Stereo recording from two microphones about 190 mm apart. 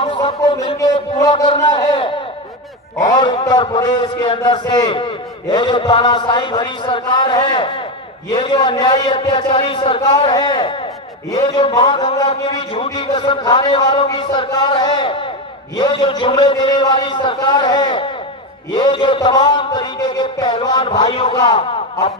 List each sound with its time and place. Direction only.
0.0 s a man's voice: 30° left (ahead or behind)
3.2 s a man's voice: 25° left (ahead or behind)